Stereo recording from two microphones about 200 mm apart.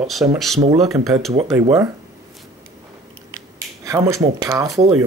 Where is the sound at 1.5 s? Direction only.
15° right (ahead or behind).